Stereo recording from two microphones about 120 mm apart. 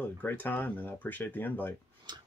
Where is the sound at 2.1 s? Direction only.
35° right (ahead or behind).